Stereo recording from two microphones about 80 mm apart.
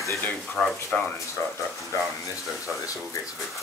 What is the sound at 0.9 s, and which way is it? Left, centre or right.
Speech, centre.